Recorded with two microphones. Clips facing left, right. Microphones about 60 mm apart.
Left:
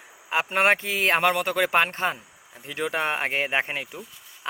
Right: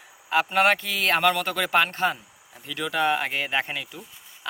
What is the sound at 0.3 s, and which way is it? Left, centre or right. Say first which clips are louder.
Speech: right 1 dB; left.